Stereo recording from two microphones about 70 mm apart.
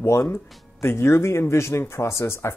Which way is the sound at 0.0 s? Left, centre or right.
Left.